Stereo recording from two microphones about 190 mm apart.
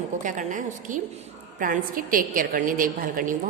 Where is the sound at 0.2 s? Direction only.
40° right (ahead or behind).